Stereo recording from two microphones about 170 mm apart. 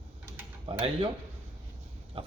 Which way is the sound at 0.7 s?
35° right (ahead or behind).